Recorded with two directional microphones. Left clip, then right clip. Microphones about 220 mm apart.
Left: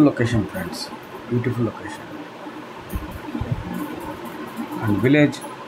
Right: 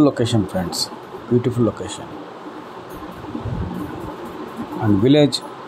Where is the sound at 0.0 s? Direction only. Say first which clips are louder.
Right 1 dB; 20° right (ahead or behind).